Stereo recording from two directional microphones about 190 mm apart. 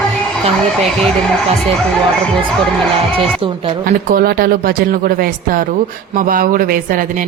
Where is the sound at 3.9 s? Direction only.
50° right (ahead or behind).